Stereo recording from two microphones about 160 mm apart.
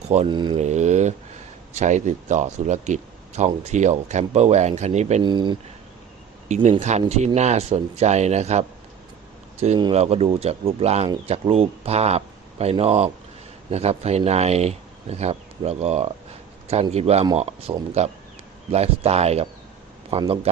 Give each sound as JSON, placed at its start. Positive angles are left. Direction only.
{"t": 0.3, "sound": "speech", "side_deg": -30}
{"t": 0.5, "sound": "speech", "side_deg": -45}
{"t": 5.2, "sound": "speech", "side_deg": -30}
{"t": 6.5, "sound": "speech", "side_deg": -45}
{"t": 9.9, "sound": "speech", "side_deg": -40}